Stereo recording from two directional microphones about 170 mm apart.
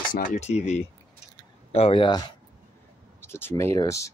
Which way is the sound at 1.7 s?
35° left (ahead or behind).